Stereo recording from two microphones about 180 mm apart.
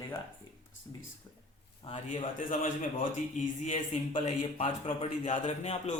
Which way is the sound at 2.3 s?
45° left (ahead or behind).